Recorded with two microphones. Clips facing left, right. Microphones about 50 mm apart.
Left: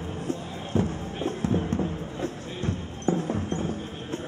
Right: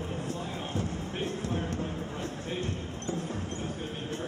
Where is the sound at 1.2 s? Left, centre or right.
Left.